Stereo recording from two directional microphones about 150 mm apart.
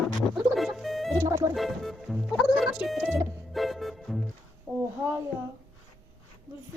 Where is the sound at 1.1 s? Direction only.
20° right (ahead or behind).